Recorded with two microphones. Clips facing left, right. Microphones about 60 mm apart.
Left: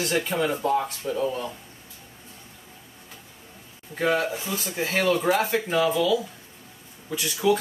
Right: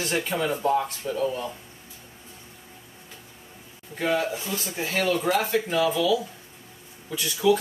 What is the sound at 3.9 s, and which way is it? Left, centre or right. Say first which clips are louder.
Speech: left 1 dB; left.